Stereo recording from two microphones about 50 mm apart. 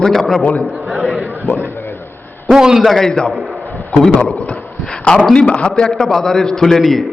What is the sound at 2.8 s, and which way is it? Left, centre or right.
Speech, centre.